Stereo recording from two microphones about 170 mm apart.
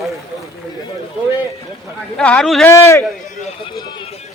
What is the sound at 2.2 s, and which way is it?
Speech, 5° left (ahead or behind).